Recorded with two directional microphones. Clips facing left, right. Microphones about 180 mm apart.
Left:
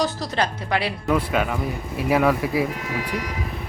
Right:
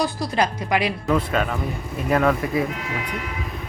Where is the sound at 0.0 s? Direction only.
10° right (ahead or behind).